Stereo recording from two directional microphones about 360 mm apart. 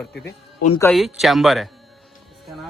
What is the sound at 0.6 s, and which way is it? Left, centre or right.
Speech, centre.